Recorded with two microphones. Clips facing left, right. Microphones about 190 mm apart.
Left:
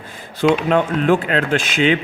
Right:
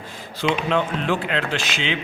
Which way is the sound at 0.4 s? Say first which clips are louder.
Left 6 dB; 50° left (ahead or behind).